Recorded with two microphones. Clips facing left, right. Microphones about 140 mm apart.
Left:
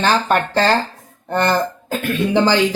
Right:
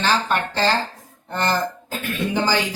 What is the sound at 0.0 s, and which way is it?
Speech, 50° left (ahead or behind).